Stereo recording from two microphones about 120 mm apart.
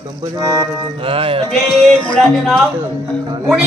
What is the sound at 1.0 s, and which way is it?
Music, 50° right (ahead or behind).